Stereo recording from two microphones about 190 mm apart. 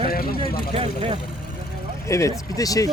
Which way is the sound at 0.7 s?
30° right (ahead or behind).